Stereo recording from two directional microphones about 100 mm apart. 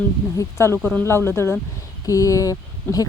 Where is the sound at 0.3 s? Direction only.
25° left (ahead or behind).